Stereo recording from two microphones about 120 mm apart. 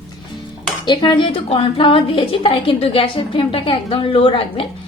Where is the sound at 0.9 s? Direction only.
35° left (ahead or behind).